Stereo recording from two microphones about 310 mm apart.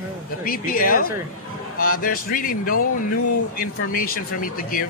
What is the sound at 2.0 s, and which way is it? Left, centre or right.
Speech, left.